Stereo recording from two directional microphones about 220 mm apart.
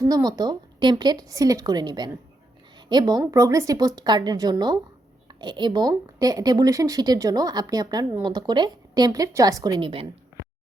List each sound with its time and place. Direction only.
0.0 s speech: 15° right (ahead or behind)